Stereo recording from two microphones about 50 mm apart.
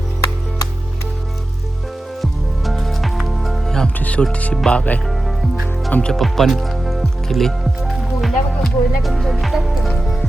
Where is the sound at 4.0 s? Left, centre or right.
Left.